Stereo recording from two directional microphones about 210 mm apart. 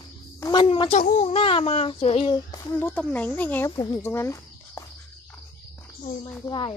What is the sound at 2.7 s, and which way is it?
Speech, 10° left (ahead or behind).